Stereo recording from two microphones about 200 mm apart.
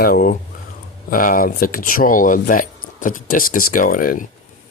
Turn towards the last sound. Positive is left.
turn(degrees=45)  # may be behind; listen again after turning